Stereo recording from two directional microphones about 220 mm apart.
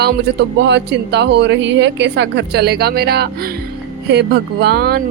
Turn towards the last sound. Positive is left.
turn(degrees=-45)  # may be behind; listen again after turning